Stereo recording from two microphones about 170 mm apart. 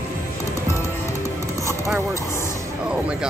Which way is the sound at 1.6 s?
15° right (ahead or behind).